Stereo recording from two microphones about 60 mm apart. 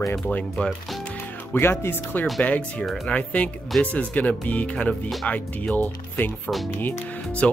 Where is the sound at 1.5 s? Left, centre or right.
Left.